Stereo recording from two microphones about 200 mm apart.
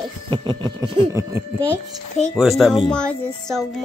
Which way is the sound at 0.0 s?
25° right (ahead or behind).